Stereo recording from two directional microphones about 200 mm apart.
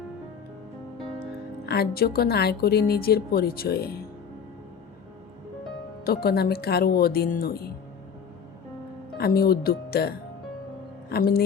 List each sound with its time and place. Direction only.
1.6 s a woman's voice: 50° left (ahead or behind)
6.1 s a woman's voice: 50° left (ahead or behind)
9.1 s a woman's voice: 50° left (ahead or behind)